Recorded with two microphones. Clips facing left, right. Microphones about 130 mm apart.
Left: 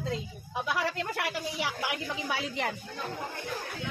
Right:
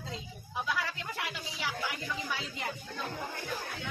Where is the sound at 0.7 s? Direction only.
65° left (ahead or behind).